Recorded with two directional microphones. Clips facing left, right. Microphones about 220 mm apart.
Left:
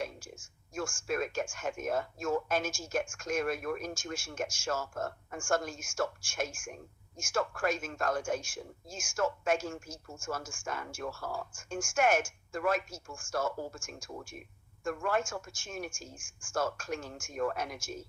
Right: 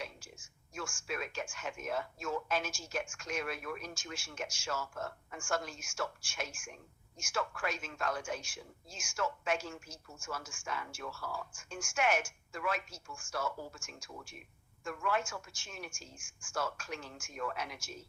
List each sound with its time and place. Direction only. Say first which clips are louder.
0.0 s a woman's voice: left 7 dB; 50° left (ahead or behind)